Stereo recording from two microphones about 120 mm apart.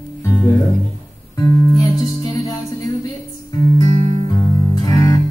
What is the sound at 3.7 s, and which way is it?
Music, 30° left (ahead or behind).